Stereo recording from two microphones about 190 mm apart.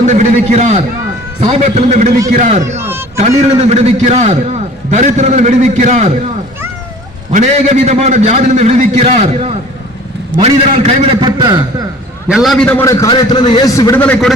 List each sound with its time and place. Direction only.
0.0 s a man's voice: 40° right (ahead or behind)
2.7 s a sound: 10° right (ahead or behind)
3.2 s a man's voice: 35° right (ahead or behind)
7.3 s a man's voice: 35° right (ahead or behind); by 11.6 s 20° right (ahead or behind)
12.3 s a man's voice: centre (ahead or behind)
12.8 s a man's voice: 15° left (ahead or behind)